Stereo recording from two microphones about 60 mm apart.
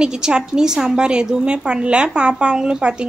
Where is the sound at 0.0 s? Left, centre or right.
Centre.